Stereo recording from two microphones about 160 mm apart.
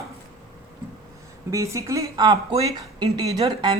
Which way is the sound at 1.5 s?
20° right (ahead or behind).